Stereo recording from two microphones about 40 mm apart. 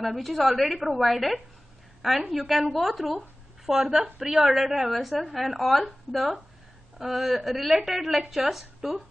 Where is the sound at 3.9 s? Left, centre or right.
Centre.